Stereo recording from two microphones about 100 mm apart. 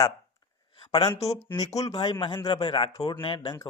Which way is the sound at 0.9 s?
45° left (ahead or behind).